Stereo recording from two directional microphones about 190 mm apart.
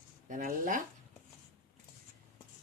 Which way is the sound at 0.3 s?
45° right (ahead or behind).